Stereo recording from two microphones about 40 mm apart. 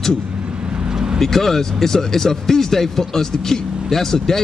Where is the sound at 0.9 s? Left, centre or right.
Centre.